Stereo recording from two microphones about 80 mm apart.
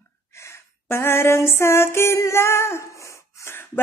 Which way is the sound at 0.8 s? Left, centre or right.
Left.